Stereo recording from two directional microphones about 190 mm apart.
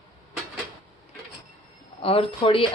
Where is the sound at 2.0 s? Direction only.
30° left (ahead or behind).